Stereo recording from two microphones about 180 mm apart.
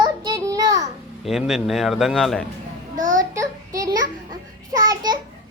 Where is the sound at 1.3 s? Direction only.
Centre (ahead or behind).